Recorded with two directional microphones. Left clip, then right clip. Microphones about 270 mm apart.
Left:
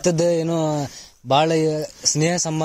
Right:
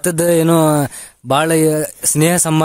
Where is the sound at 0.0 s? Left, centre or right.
Right.